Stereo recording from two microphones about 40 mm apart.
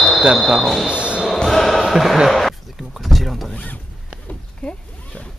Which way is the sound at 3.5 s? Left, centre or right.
Left.